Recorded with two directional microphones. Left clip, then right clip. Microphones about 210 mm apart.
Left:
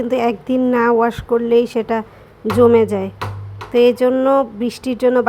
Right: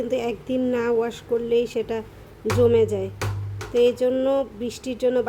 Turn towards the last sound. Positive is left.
turn(degrees=20)  # may be behind; listen again after turning